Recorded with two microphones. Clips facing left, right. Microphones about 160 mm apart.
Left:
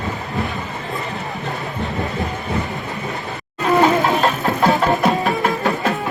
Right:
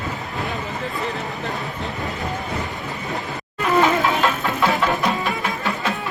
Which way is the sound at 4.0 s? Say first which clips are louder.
Left 3 dB; 40° left (ahead or behind).